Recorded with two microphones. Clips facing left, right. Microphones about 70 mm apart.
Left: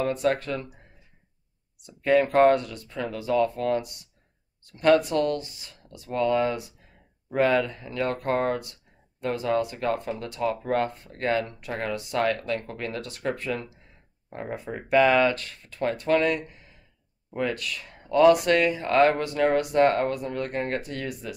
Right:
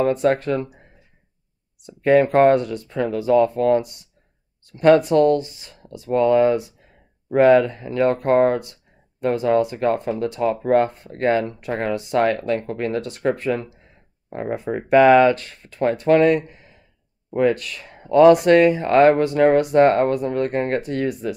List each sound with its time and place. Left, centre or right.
0.0 s speech: right
1.8 s speech: right